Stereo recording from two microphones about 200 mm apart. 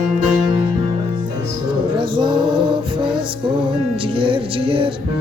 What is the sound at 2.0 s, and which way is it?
Music, 25° right (ahead or behind).